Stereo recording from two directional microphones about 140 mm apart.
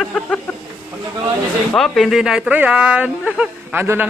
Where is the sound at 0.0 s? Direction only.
5° left (ahead or behind).